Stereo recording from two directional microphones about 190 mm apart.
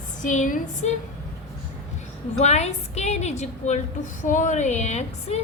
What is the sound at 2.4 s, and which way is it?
A woman's voice, 35° left (ahead or behind).